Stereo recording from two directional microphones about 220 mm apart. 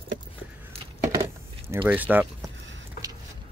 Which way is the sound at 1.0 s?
15° right (ahead or behind).